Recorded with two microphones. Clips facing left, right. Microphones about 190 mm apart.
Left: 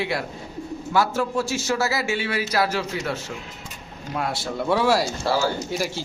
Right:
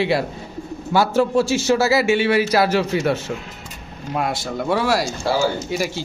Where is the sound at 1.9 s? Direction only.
70° right (ahead or behind).